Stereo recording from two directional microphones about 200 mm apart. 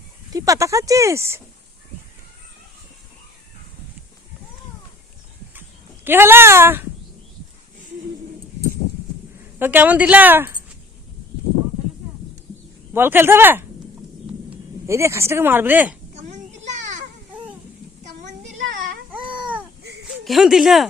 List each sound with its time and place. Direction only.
0.3 s speech: 15° right (ahead or behind)
6.1 s speech: 10° right (ahead or behind)
9.6 s speech: 10° right (ahead or behind)
12.9 s speech: 10° right (ahead or behind)
16.1 s children playing: 35° right (ahead or behind)
18.0 s child singing: 40° right (ahead or behind)
19.1 s babbling: 5° right (ahead or behind)
20.2 s speech: centre (ahead or behind)